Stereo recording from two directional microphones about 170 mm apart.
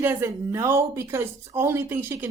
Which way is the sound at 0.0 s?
15° right (ahead or behind).